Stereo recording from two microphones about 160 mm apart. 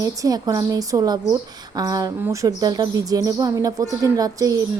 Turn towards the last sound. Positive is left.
turn(degrees=-20)  # may be behind; listen again after turning